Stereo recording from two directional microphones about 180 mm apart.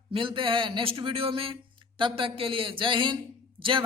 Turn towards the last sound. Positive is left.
turn(degrees=-30)  # may be behind; listen again after turning